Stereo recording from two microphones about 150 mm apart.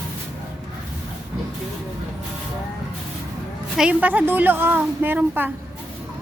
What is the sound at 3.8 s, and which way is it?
A woman's voice, 10° right (ahead or behind).